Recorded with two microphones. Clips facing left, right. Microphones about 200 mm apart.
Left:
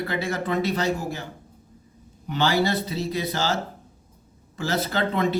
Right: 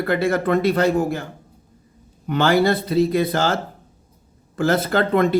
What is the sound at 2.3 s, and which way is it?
Speech, 55° right (ahead or behind).